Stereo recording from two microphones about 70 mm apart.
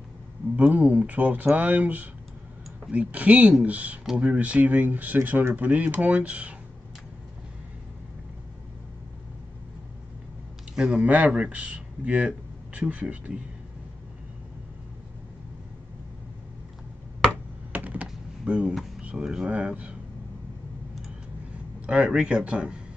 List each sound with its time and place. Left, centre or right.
0.6 s speech: right
10.8 s speech: centre
17.7 s computer keyboard: right
18.0 s computer keyboard: centre
18.9 s a sound: centre
19.2 s speech: centre
21.8 s speech: centre